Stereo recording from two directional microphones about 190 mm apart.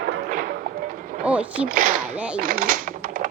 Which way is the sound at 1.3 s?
5° right (ahead or behind).